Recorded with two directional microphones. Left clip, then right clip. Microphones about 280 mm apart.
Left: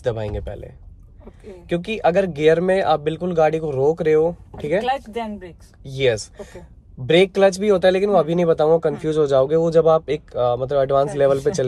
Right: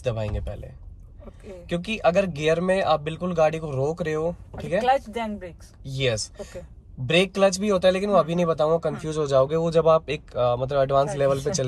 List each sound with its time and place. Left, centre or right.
0.0 s speech: centre